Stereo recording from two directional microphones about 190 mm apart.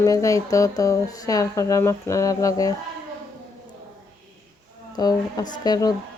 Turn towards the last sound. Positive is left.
turn(degrees=20)  # may be behind; listen again after turning